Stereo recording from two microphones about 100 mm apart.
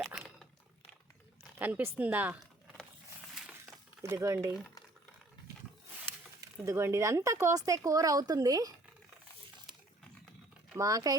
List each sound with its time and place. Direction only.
0.0 s a sound: centre (ahead or behind)
1.5 s speech: 20° right (ahead or behind)
4.0 s speech: 30° right (ahead or behind)
6.1 s speech: 30° right (ahead or behind)
10.8 s speech: 35° right (ahead or behind)